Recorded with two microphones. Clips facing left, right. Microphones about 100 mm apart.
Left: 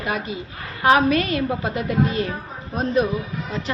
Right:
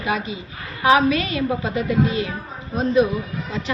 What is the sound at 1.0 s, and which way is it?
A woman's voice, 50° left (ahead or behind).